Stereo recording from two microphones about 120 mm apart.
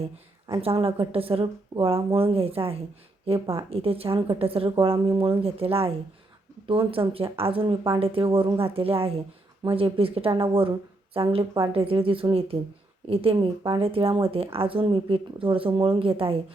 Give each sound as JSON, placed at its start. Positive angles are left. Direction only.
{"t": 0.5, "sound": "speech", "side_deg": -50}